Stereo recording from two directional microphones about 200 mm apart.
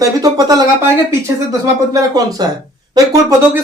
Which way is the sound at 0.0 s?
20° right (ahead or behind).